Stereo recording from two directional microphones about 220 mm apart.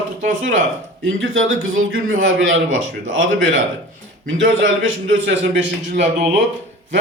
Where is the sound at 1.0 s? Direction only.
65° right (ahead or behind).